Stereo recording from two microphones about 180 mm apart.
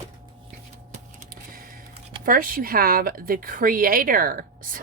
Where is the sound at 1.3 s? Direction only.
50° right (ahead or behind).